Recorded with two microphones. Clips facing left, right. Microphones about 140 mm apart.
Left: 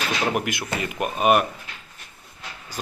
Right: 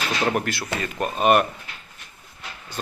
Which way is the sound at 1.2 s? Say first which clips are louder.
Right 1 dB; 5° left (ahead or behind).